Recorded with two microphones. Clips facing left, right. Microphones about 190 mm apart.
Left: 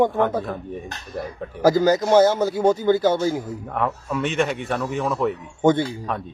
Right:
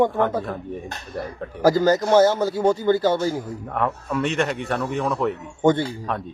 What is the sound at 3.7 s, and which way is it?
A man's voice, centre (ahead or behind).